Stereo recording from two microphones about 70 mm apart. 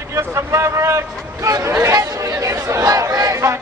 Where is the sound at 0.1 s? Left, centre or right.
Right.